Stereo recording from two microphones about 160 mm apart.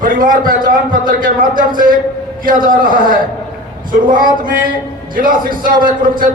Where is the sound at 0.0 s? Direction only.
60° right (ahead or behind).